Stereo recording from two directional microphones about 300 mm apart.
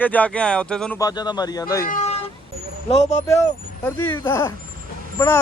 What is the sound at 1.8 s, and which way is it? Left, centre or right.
Speech, left.